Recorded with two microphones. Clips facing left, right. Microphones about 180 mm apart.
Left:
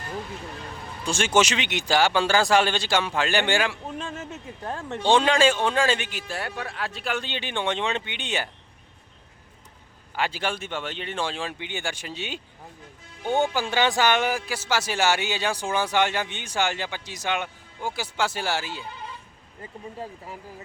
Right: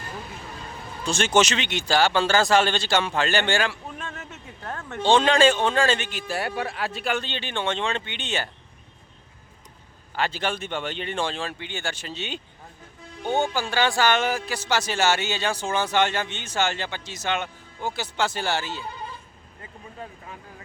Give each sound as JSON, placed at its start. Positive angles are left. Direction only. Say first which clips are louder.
{"t": 1.0, "sound": "speech", "louder": "right 1 dB", "side_deg": 10}
{"t": 3.9, "sound": "speech", "louder": "left 4 dB", "side_deg": 25}
{"t": 5.0, "sound": "speech", "louder": "right 1 dB", "side_deg": 10}
{"t": 6.2, "sound": "speech", "louder": "right 4 dB", "side_deg": -10}
{"t": 7.2, "sound": "speech", "louder": "even", "side_deg": 15}
{"t": 10.2, "sound": "speech", "louder": "right 1 dB", "side_deg": 10}
{"t": 13.4, "sound": "speech", "louder": "left 1 dB", "side_deg": 15}